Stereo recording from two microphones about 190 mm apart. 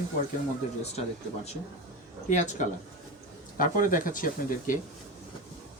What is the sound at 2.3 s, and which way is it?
Speech, 40° left (ahead or behind).